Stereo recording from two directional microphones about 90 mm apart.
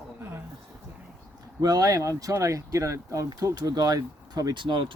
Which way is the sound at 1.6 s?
40° right (ahead or behind).